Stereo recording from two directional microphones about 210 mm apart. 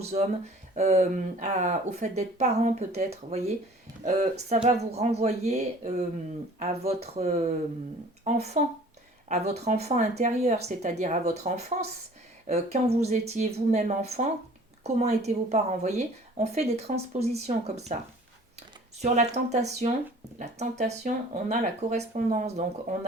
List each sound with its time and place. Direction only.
0.1 s speech: 35° right (ahead or behind)
19.0 s speech: 35° right (ahead or behind)